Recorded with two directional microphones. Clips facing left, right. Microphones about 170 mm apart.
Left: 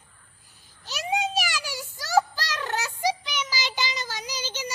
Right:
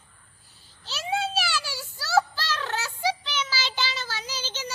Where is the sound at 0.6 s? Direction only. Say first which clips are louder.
Left 1 dB; 15° left (ahead or behind).